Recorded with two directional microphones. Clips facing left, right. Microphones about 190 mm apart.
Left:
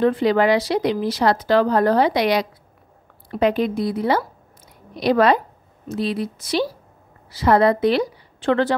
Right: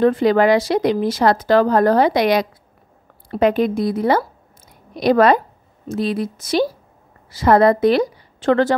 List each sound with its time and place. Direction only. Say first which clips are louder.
0.0 s a woman's voice: right 3 dB; 45° right (ahead or behind)